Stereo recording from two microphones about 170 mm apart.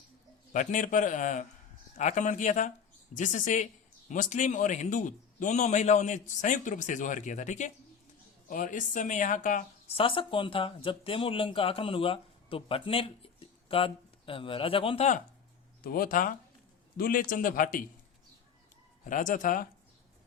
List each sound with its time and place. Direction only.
0.5 s a man's voice: 50° left (ahead or behind)
9.9 s speech: 30° left (ahead or behind)
15.8 s speech: 60° left (ahead or behind)
19.0 s a man's voice: 50° left (ahead or behind)